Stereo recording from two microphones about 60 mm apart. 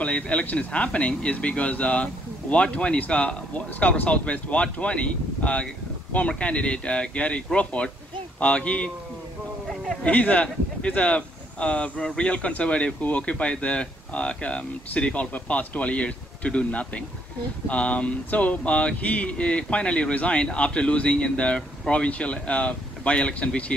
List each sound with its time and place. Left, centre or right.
0.0 s speech: left
10.0 s speech: left